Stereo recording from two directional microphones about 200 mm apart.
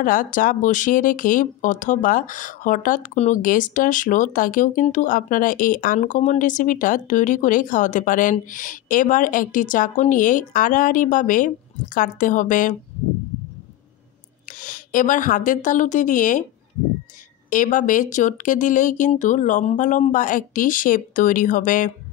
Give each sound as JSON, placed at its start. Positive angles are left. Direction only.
{"t": 0.0, "sound": "speech", "side_deg": 40}
{"t": 14.6, "sound": "a woman's voice", "side_deg": 40}
{"t": 17.5, "sound": "speech", "side_deg": 40}